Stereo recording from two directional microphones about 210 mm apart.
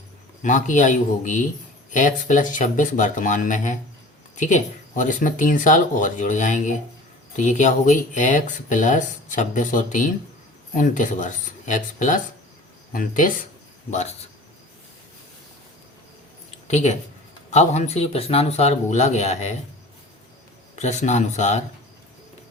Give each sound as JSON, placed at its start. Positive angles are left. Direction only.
{"t": 0.4, "sound": "speech", "side_deg": 35}
{"t": 16.6, "sound": "speech", "side_deg": 30}
{"t": 20.7, "sound": "speech", "side_deg": 35}